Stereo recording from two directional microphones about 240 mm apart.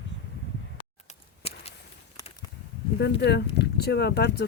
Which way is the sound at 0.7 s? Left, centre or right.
Left.